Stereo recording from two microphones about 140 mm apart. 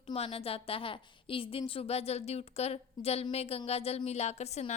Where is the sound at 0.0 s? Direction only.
45° left (ahead or behind).